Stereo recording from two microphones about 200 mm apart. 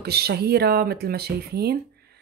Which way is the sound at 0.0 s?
50° right (ahead or behind).